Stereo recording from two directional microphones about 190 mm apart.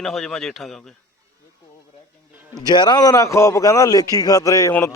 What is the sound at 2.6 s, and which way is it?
A man's voice, 20° left (ahead or behind).